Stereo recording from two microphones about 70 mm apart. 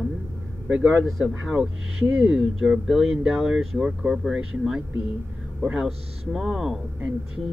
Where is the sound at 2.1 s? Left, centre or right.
Centre.